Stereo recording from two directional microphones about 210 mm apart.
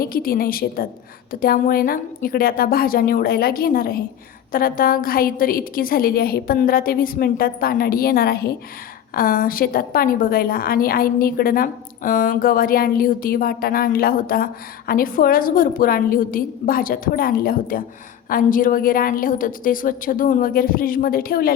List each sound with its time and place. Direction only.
0.0 s a woman's voice: 45° left (ahead or behind)